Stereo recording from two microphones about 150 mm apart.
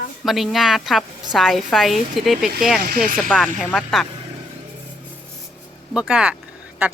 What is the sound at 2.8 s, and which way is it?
Speech, 90° right.